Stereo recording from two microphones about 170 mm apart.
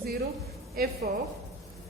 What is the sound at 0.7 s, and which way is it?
Speech, 65° right (ahead or behind).